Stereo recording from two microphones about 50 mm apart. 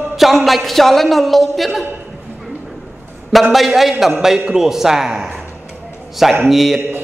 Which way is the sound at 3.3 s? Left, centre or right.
Centre.